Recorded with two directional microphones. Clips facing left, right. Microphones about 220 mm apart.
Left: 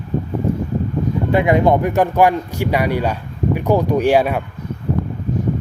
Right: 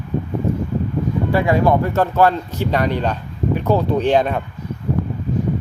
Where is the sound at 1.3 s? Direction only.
20° left (ahead or behind).